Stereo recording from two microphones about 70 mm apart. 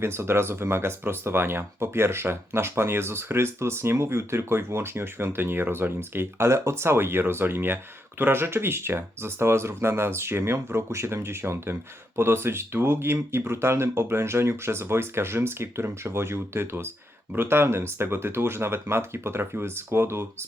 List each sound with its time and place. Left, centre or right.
0.0 s speech: right